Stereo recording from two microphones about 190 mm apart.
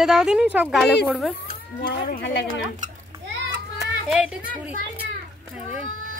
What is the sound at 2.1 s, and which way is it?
Speech, 65° left (ahead or behind).